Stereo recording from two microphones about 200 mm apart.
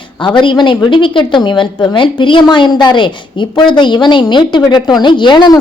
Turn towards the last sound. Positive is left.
turn(degrees=20)  # may be behind; listen again after turning